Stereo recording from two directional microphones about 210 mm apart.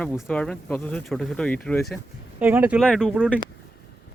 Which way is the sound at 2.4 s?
10° right (ahead or behind).